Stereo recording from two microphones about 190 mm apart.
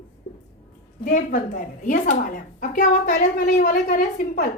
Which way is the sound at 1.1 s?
45° left (ahead or behind).